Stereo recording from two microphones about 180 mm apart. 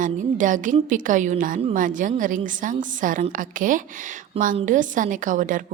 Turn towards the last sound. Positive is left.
turn(degrees=-45)  # may be behind; listen again after turning